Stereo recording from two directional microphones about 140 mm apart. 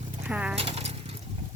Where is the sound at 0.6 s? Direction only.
45° right (ahead or behind).